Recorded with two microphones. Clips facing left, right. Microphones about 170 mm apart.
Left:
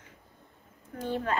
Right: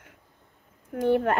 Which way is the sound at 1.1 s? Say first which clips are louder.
Right 7 dB; 55° right (ahead or behind).